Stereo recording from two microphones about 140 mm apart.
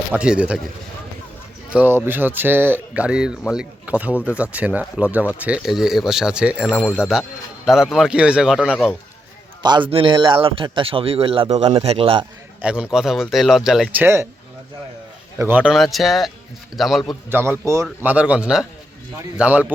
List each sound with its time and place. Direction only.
0.1 s speech: 10° right (ahead or behind)
1.7 s speech: 15° right (ahead or behind)
9.6 s a man's voice: 35° right (ahead or behind)
12.6 s speech: 10° right (ahead or behind)
15.4 s speech: 15° right (ahead or behind)
15.7 s speech: centre (ahead or behind)
17.2 s speech: 15° right (ahead or behind)